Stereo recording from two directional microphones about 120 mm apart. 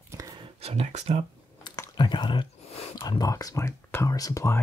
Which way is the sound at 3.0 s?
35° left (ahead or behind).